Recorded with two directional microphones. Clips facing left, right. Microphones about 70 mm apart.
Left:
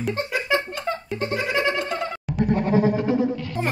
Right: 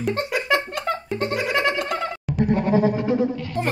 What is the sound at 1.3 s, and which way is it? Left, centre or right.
Goat, right.